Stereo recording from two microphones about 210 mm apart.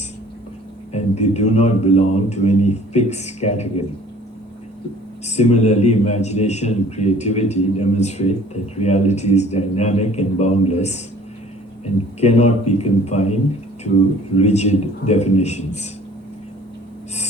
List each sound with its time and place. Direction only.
0.9 s a man's voice: 30° left (ahead or behind)
5.2 s a man's voice: 30° left (ahead or behind)
12.2 s a man's voice: 30° left (ahead or behind)